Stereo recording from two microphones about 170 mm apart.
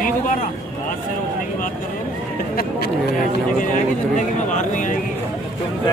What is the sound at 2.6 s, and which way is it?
Speech, 55° left (ahead or behind).